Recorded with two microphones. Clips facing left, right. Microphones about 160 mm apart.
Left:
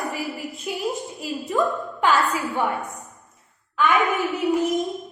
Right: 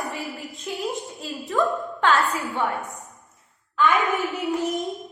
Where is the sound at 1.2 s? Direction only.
20° left (ahead or behind).